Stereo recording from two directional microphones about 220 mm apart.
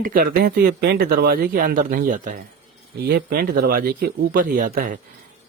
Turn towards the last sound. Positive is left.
turn(degrees=-40)  # may be behind; listen again after turning